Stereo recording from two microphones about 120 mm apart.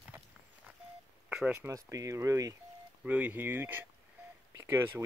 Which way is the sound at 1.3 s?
10° right (ahead or behind).